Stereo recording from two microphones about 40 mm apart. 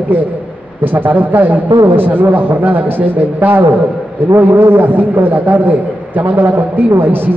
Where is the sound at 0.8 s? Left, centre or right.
Right.